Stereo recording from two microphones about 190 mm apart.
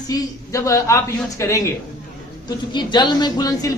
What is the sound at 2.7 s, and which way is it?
A woman's voice, 25° left (ahead or behind).